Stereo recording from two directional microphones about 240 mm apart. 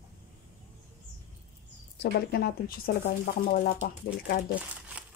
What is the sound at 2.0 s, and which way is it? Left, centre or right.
Speech, left.